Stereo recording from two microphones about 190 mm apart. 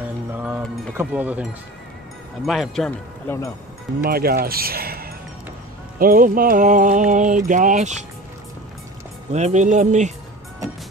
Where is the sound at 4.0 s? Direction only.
55° right (ahead or behind).